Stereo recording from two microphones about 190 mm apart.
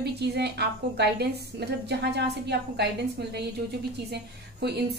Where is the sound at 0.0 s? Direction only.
60° right (ahead or behind).